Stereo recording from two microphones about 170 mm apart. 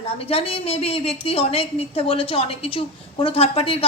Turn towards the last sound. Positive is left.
turn(degrees=35)  # may be behind; listen again after turning